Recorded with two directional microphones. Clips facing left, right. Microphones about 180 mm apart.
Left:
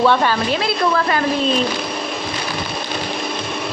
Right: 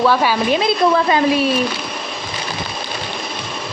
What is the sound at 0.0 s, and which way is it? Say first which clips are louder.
Speech: even; 5° right (ahead or behind).